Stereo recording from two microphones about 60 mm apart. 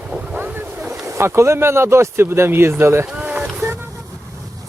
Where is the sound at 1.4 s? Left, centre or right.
Right.